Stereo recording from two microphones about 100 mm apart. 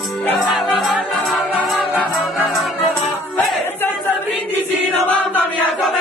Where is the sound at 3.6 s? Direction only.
20° left (ahead or behind).